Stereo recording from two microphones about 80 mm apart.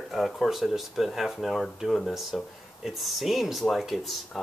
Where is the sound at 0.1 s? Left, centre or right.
Centre.